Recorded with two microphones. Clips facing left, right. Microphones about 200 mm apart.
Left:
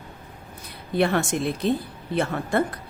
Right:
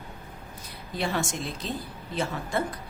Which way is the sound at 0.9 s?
60° left (ahead or behind).